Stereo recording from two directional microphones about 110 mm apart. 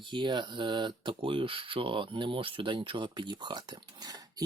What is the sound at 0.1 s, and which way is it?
Speech, 45° right (ahead or behind).